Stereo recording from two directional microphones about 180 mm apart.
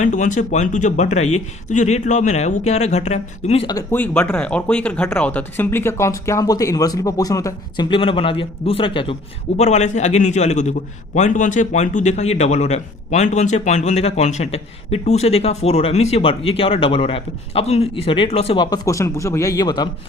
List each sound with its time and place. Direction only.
0.0 s a man's voice: 45° left (ahead or behind)
3.8 s speech: 10° left (ahead or behind); by 9.1 s 30° left (ahead or behind)
9.6 s a man's voice: 40° left (ahead or behind); by 19.9 s 25° left (ahead or behind)